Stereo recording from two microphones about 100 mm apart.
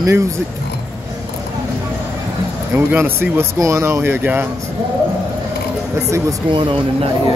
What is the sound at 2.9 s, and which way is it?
Speech, 20° right (ahead or behind).